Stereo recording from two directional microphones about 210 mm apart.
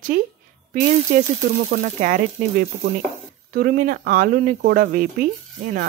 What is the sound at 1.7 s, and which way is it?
Speech, 40° right (ahead or behind).